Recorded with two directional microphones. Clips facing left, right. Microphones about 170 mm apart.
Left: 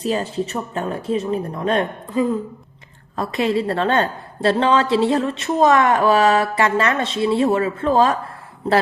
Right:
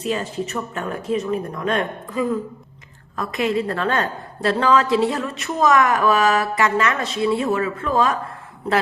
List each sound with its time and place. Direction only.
0.0 s a woman's voice: 35° left (ahead or behind)